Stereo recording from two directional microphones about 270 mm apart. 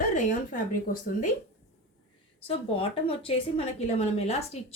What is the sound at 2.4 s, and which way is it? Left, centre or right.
A woman's voice, left.